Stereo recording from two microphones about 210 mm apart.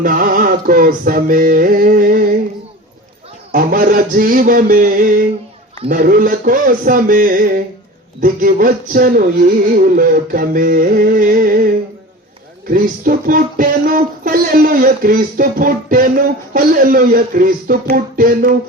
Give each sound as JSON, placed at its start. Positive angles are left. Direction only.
{"t": 0.0, "sound": "speech", "side_deg": -40}
{"t": 3.5, "sound": "speech", "side_deg": -40}
{"t": 8.2, "sound": "a sound", "side_deg": -40}
{"t": 12.6, "sound": "speech", "side_deg": -40}